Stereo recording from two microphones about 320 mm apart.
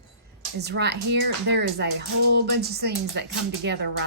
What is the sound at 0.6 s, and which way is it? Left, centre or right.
Speech, right.